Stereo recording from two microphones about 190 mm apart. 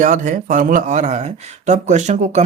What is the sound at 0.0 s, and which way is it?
Speech, 45° right (ahead or behind).